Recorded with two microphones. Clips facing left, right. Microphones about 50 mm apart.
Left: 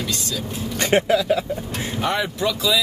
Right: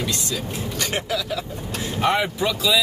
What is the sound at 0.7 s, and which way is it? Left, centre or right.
Speech, left.